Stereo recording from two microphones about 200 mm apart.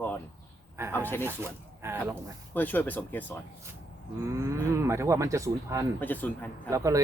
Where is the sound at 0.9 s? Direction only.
10° left (ahead or behind).